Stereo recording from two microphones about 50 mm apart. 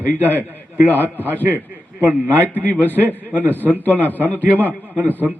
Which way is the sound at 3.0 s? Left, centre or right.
Left.